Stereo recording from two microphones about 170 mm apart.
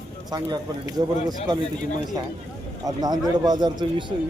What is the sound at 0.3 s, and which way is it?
Speech, 25° right (ahead or behind).